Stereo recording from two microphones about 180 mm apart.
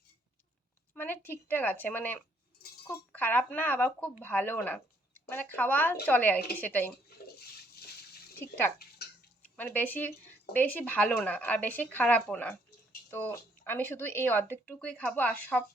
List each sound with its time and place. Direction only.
0.9 s speech: 10° left (ahead or behind)
9.0 s a sound: 60° left (ahead or behind)
9.4 s speech: 10° left (ahead or behind)